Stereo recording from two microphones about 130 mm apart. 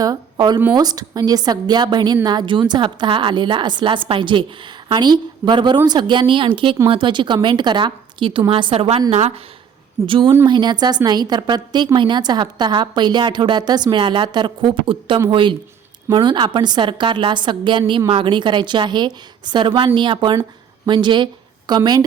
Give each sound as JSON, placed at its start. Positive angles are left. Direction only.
{"t": 0.0, "sound": "a woman's voice", "side_deg": -30}
{"t": 10.1, "sound": "a woman's voice", "side_deg": -35}